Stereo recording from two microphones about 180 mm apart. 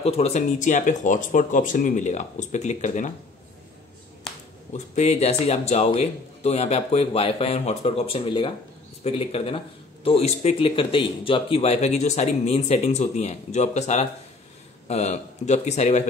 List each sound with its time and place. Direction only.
0.0 s speech: 35° left (ahead or behind)
4.7 s speech: 40° left (ahead or behind)